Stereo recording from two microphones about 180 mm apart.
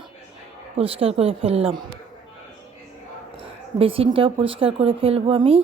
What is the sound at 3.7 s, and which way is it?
Speech, 30° right (ahead or behind).